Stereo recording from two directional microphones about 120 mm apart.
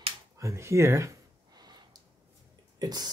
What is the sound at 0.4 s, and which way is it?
Speech, 25° right (ahead or behind).